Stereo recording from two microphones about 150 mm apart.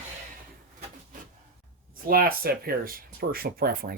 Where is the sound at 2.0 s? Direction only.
85° right.